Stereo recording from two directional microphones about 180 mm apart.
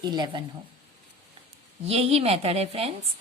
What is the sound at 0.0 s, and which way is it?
Speech, 25° right (ahead or behind).